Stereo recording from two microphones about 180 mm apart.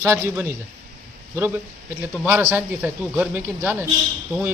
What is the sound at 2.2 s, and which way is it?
A man's voice, 10° right (ahead or behind).